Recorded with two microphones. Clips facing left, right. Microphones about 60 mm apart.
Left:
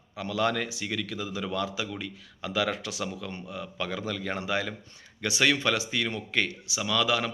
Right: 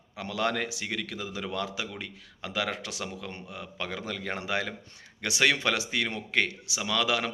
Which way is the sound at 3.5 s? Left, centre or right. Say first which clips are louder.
Left 3 dB; right.